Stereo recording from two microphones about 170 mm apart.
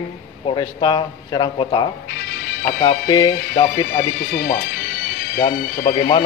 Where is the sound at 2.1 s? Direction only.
70° left (ahead or behind).